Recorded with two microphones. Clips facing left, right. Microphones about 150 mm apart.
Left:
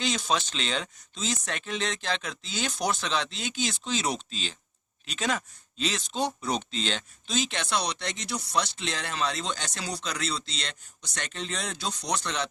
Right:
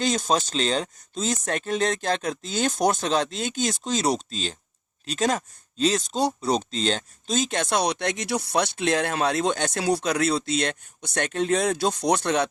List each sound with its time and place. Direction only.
0.0 s speech: 45° right (ahead or behind)